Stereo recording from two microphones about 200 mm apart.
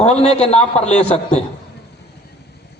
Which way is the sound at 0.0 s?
30° left (ahead or behind).